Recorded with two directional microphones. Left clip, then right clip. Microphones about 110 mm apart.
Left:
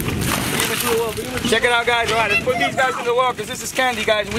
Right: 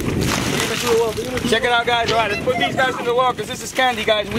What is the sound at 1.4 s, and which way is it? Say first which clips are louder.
Speech: left 1 dB; 15° left (ahead or behind).